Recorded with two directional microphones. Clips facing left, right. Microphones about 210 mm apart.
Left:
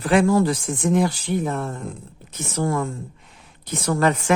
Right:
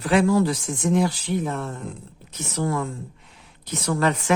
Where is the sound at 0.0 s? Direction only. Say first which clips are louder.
Left 2 dB; 50° left (ahead or behind).